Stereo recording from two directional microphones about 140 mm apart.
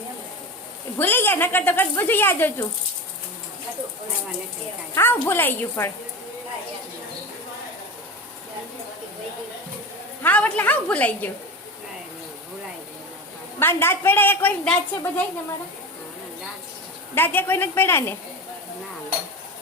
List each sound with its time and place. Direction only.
0.9 s speech: 15° left (ahead or behind)
4.9 s speech: 15° left (ahead or behind)
10.2 s speech: 10° left (ahead or behind)
13.6 s speech: 15° left (ahead or behind)
17.2 s speech: 15° left (ahead or behind)